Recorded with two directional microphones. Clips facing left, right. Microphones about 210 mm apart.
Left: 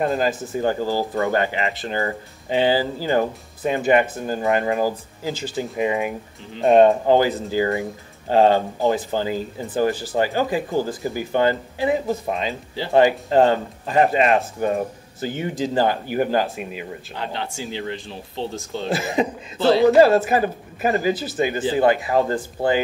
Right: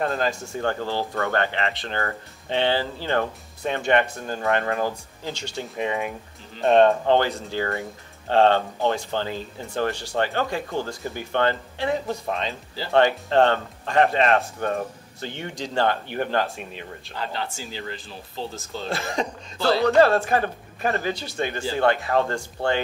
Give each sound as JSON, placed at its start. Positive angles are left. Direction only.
{"t": 0.0, "sound": "speech", "side_deg": 5}
{"t": 4.2, "sound": "speech", "side_deg": 15}
{"t": 4.5, "sound": "speech", "side_deg": 5}